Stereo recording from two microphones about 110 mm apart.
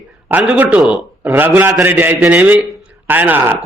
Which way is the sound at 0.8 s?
5° right (ahead or behind).